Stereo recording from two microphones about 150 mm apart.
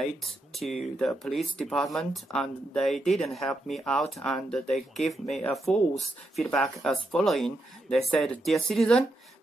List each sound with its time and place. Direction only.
0.2 s speech: centre (ahead or behind)